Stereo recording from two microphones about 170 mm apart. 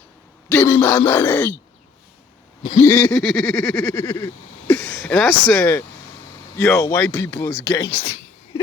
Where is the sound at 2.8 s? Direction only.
10° left (ahead or behind).